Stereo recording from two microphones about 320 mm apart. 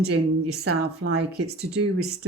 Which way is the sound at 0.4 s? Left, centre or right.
Right.